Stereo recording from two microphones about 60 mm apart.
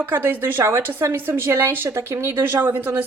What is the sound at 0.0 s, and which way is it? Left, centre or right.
Speech, right.